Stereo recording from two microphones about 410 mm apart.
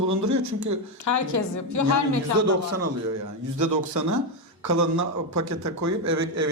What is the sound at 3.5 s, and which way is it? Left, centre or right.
A man's voice, right.